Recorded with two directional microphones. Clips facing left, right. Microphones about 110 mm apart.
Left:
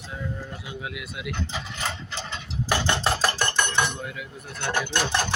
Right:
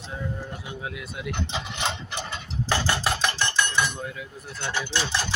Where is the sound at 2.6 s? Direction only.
15° left (ahead or behind).